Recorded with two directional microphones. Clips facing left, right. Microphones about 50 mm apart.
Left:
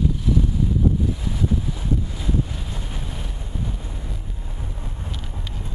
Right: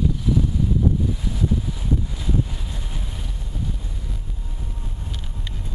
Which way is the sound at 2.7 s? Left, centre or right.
Centre.